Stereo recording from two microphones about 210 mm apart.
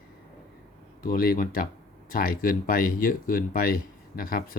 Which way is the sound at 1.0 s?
45° left (ahead or behind).